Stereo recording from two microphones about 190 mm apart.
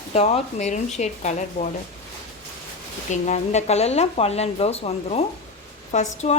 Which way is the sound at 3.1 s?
40° left (ahead or behind).